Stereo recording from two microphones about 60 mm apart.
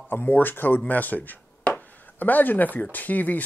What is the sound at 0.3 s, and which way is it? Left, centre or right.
Speech, left.